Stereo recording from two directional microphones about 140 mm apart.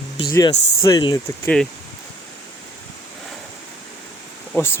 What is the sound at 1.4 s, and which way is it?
Speech, 5° left (ahead or behind).